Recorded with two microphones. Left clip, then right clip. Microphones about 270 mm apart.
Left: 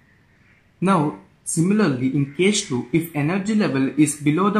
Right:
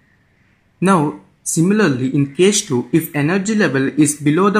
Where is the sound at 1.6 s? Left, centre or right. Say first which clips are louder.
Right 5 dB; right.